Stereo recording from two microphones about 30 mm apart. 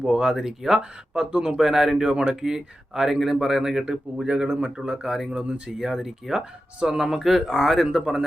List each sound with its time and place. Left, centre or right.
0.0 s speech: right
0.3 s speech: centre
1.3 s speech: right
1.5 s speech: centre
2.0 s speech: right
5.0 s speech: centre
5.3 s speech: right
5.7 s speech: centre
7.2 s speech: centre
7.9 s speech: right